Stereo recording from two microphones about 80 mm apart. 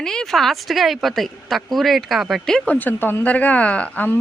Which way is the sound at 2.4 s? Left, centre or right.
Centre.